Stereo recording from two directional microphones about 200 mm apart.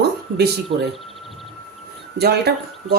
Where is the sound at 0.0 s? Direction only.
55° right (ahead or behind).